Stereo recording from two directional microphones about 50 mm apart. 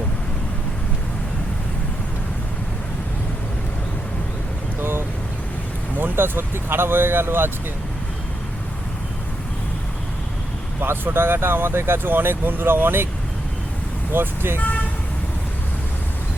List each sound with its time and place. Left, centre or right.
4.8 s vehicle: right
6.0 s speech: right
10.8 s speech: right
14.1 s speech: right